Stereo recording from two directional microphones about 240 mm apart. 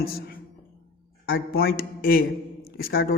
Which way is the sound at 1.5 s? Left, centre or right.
Left.